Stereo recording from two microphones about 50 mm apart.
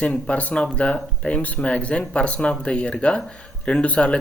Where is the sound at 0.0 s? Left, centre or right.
Left.